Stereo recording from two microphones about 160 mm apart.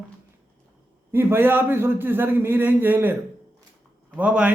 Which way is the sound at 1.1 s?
15° right (ahead or behind).